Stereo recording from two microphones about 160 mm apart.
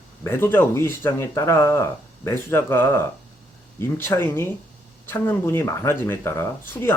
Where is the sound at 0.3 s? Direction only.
15° left (ahead or behind).